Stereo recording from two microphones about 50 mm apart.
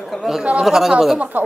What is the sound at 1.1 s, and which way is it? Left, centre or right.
Speech, right.